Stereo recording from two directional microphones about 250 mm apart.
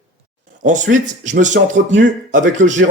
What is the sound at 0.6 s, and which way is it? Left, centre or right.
Speech, right.